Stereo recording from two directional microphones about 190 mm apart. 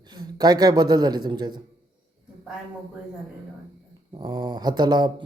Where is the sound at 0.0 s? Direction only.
20° right (ahead or behind).